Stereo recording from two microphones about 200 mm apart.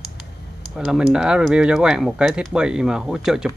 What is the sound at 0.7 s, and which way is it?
Speech, centre (ahead or behind).